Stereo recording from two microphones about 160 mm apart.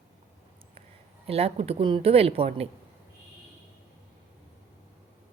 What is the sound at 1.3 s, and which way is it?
A woman's voice, 40° right (ahead or behind).